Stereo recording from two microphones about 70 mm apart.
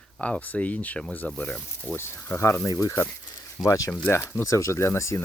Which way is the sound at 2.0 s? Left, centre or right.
Left.